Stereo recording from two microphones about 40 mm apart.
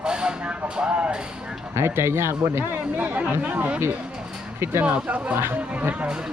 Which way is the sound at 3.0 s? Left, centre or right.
Right.